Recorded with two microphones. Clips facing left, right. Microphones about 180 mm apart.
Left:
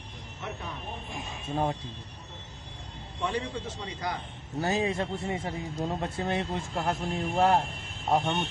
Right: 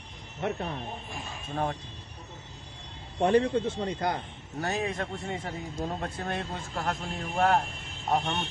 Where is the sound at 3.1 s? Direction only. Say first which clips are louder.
Right 9 dB; 55° right (ahead or behind).